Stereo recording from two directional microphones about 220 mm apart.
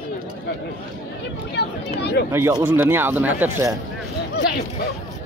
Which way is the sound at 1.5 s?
50° left (ahead or behind).